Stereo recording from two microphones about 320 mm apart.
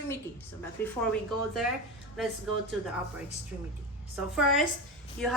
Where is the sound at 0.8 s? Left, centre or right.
Centre.